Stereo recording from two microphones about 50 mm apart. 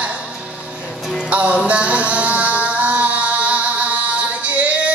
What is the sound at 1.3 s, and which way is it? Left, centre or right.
Music, right.